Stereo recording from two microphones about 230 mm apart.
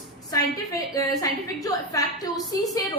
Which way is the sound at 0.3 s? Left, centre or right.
Centre.